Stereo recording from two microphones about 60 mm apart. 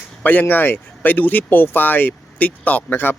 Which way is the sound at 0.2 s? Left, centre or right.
Left.